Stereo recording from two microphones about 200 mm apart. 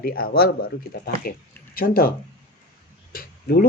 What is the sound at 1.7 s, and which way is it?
Speech, 45° left (ahead or behind).